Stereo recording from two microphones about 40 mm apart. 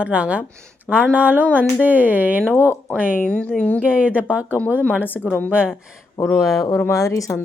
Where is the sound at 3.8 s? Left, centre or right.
Right.